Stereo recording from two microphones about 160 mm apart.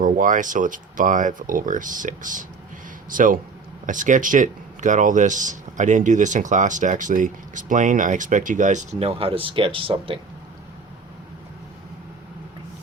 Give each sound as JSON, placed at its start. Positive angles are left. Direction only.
{"t": 0.0, "sound": "speech", "side_deg": -55}